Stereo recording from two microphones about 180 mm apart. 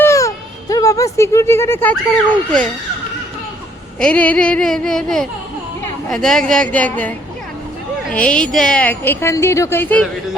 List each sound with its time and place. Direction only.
0.0 s speech: 15° left (ahead or behind)
4.0 s a sound: 5° left (ahead or behind)
8.1 s a woman's voice: 5° left (ahead or behind)